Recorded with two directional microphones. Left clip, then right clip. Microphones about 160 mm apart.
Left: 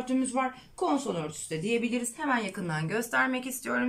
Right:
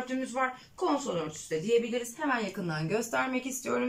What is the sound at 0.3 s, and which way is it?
Speech, 20° left (ahead or behind).